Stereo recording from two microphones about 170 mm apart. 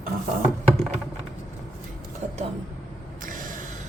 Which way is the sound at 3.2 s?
50° right (ahead or behind).